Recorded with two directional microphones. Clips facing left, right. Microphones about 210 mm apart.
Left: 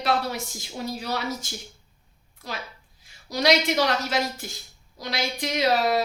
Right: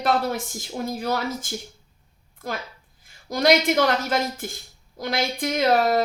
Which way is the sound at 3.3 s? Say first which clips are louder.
Right 3 dB; 50° right (ahead or behind).